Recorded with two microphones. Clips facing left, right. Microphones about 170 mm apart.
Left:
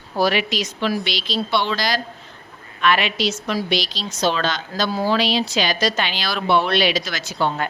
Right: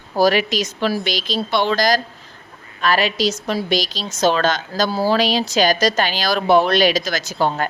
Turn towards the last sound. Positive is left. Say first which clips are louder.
# right 3 dB
turn(degrees=-40)  # may be behind; listen again after turning